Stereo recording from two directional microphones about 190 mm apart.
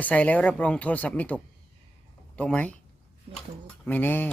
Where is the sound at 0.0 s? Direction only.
5° left (ahead or behind).